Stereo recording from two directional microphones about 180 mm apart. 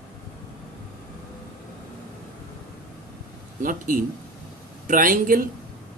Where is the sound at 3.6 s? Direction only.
50° right (ahead or behind).